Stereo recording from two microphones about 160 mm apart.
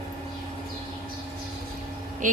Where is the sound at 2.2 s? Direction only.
55° right (ahead or behind).